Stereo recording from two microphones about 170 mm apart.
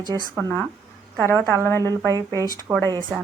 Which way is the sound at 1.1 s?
15° left (ahead or behind).